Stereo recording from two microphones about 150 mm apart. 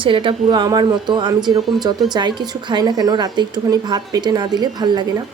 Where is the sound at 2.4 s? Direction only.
30° right (ahead or behind).